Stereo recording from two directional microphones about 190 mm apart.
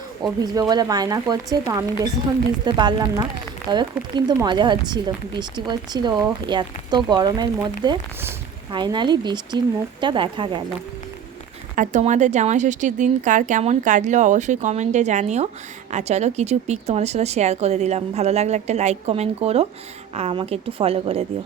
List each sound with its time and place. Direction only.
0.5 s speech: 20° right (ahead or behind)
11.8 s speech: 40° right (ahead or behind)